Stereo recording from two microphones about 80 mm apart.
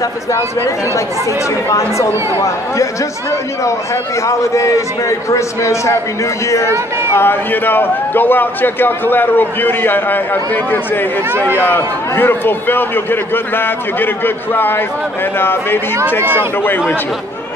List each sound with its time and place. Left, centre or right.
0.3 s a man's voice: left
6.7 s speech: right
7.2 s a man's voice: left